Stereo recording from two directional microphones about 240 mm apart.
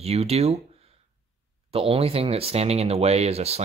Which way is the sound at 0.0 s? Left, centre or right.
Right.